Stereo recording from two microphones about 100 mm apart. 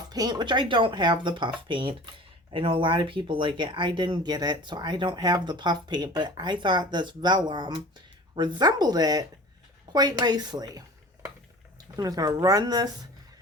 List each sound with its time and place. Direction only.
0.1 s speech: 45° right (ahead or behind)